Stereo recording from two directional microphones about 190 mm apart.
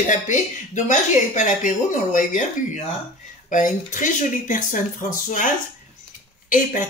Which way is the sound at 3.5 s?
45° left (ahead or behind).